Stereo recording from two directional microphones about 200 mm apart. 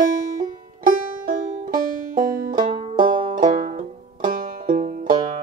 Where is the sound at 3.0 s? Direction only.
40° right (ahead or behind).